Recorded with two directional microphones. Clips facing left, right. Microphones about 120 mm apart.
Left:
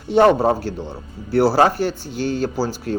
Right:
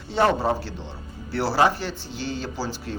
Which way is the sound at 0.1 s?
50° left (ahead or behind).